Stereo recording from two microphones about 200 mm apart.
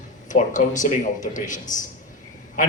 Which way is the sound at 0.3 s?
40° left (ahead or behind).